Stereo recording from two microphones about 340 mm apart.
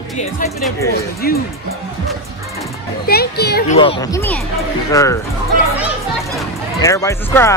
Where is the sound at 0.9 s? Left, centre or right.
Left.